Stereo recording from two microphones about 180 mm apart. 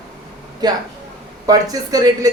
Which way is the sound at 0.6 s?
25° right (ahead or behind).